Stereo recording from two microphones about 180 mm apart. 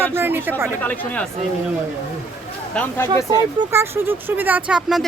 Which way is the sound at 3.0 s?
20° right (ahead or behind).